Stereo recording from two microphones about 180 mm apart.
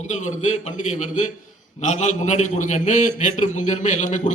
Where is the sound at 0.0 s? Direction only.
40° left (ahead or behind).